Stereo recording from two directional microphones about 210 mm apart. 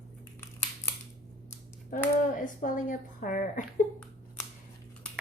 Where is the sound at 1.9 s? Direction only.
40° left (ahead or behind).